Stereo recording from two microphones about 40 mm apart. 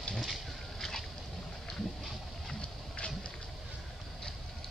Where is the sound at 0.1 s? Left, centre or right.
Centre.